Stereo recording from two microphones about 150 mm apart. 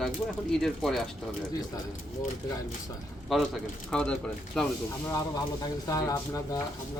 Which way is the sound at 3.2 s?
Centre (ahead or behind).